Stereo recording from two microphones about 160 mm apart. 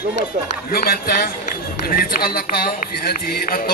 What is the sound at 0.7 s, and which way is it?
Speech, 70° left (ahead or behind).